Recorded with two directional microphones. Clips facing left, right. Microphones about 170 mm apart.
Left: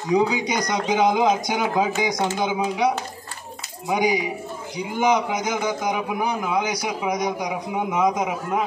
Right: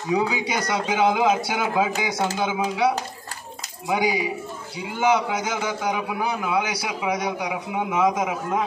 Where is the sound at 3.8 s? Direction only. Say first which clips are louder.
Left 1 dB; 15° left (ahead or behind).